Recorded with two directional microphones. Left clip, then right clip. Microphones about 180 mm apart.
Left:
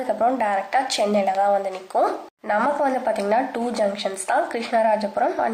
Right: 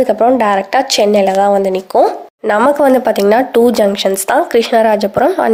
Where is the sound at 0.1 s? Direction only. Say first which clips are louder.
Right 10 dB; 50° right (ahead or behind).